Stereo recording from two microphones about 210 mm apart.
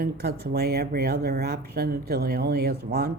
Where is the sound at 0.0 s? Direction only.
50° right (ahead or behind).